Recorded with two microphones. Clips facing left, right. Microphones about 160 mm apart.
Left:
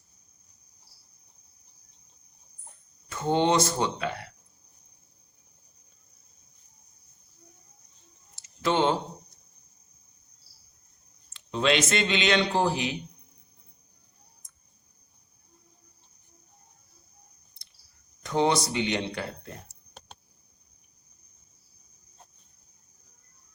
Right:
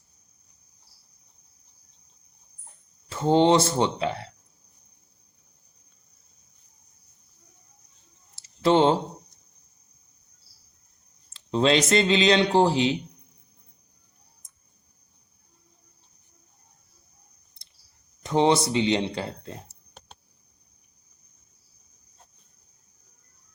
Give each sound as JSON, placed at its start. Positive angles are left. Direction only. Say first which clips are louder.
{"t": 3.1, "sound": "speech", "louder": "right 5 dB", "side_deg": -30}
{"t": 8.4, "sound": "a sound", "louder": "right 5 dB", "side_deg": -30}
{"t": 11.3, "sound": "speech", "louder": "right 4 dB", "side_deg": -30}
{"t": 18.2, "sound": "speech", "louder": "right 4 dB", "side_deg": -25}